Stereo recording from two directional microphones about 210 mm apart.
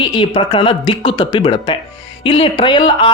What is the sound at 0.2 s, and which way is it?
A man's voice, 25° left (ahead or behind).